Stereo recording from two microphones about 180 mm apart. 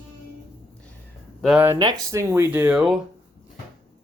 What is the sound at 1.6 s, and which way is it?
Speech, 20° right (ahead or behind).